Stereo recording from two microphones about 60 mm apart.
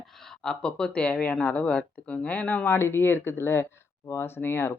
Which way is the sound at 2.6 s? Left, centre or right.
Left.